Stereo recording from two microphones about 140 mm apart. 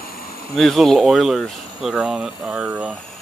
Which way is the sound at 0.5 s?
Centre (ahead or behind).